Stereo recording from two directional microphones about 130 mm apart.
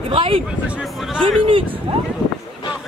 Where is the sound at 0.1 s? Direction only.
40° right (ahead or behind).